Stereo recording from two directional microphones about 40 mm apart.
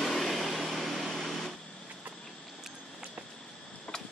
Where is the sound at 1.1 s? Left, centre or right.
Centre.